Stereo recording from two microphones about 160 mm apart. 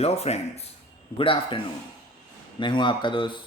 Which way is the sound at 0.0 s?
40° left (ahead or behind).